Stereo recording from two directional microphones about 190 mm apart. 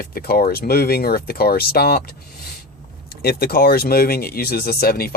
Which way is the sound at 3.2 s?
55° left (ahead or behind).